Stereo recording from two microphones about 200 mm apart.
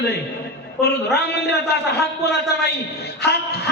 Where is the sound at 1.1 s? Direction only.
55° left (ahead or behind).